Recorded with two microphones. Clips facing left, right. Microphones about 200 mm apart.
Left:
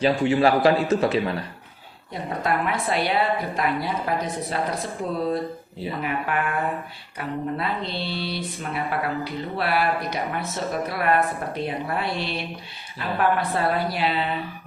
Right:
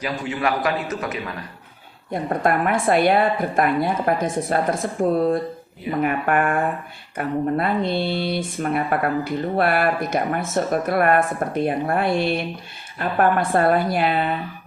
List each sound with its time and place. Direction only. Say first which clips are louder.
0.0 s a man's voice: left 6 dB; 30° left (ahead or behind)
2.1 s speech: right 5 dB; 50° right (ahead or behind)